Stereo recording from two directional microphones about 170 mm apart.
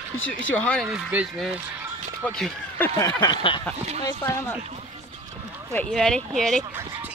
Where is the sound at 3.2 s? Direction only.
25° left (ahead or behind).